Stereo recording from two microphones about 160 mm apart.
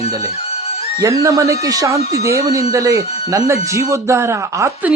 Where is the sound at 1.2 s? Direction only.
20° right (ahead or behind).